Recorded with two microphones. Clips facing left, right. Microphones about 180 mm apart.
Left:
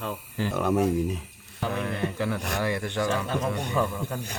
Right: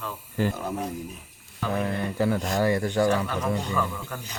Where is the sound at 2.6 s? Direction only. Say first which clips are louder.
Right 6 dB; 40° right (ahead or behind).